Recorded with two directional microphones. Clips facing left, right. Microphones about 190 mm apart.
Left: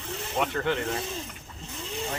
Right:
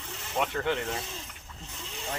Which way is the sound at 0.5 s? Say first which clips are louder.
Left 1 dB; 15° right (ahead or behind).